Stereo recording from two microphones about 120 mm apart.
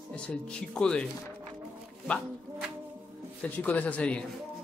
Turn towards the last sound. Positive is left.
turn(degrees=10)  # may be behind; listen again after turning